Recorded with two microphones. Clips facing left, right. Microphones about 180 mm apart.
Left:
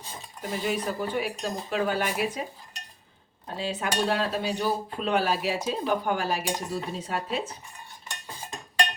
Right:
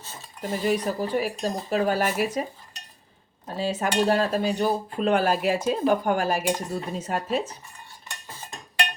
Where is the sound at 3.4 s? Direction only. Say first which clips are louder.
Right 4 dB; 45° right (ahead or behind).